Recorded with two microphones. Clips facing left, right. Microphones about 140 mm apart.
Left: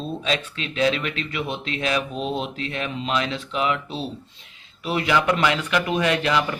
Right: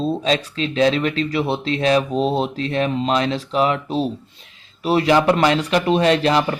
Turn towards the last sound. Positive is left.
turn(degrees=-35)  # may be behind; listen again after turning